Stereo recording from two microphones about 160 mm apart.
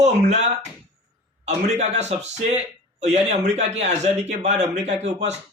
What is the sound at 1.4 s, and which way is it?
Speech, 45° right (ahead or behind).